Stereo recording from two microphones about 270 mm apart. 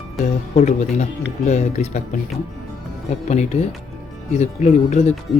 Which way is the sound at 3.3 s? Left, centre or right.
Left.